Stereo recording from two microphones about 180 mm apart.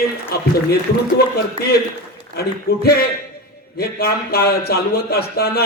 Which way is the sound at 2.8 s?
60° left (ahead or behind).